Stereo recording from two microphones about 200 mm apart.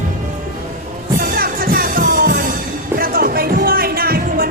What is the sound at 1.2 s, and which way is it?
Music, 45° right (ahead or behind).